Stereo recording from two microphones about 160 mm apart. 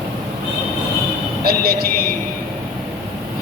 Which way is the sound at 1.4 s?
70° right (ahead or behind).